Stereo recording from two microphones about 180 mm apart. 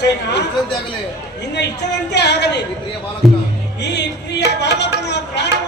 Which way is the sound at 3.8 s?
70° left (ahead or behind).